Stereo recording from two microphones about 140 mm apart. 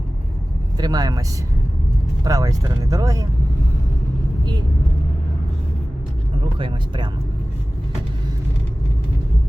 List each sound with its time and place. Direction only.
0.8 s speech: 30° right (ahead or behind)
2.2 s speech: 25° right (ahead or behind)
6.6 s speech: 35° right (ahead or behind)